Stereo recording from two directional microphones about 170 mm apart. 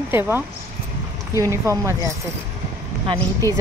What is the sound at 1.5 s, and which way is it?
Speech, 15° right (ahead or behind).